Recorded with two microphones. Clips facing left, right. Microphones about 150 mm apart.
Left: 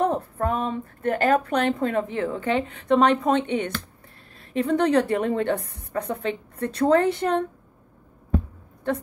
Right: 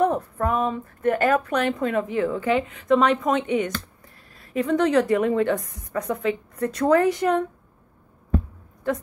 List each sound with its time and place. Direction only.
0.0 s a woman's voice: 30° left (ahead or behind)